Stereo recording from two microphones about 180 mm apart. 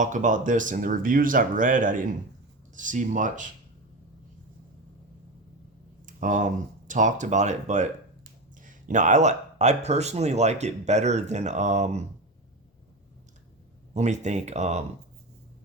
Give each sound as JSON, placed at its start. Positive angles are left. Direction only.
{"t": 0.0, "sound": "speech", "side_deg": -45}
{"t": 6.1, "sound": "speech", "side_deg": -45}
{"t": 13.9, "sound": "speech", "side_deg": -40}